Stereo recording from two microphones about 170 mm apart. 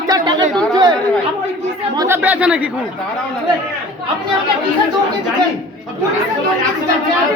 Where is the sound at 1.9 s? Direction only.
15° right (ahead or behind).